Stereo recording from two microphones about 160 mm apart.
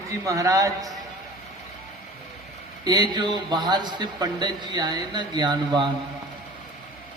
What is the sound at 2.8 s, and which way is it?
A man's voice, 25° right (ahead or behind).